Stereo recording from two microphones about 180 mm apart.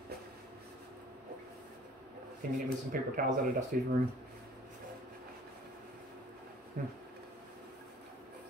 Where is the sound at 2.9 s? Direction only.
50° right (ahead or behind).